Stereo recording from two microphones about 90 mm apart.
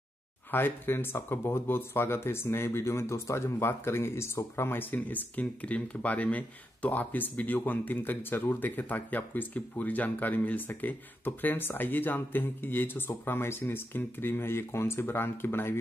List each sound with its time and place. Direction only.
0.5 s speech: 25° left (ahead or behind)